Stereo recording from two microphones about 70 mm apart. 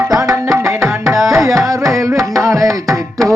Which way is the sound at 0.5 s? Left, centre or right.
Right.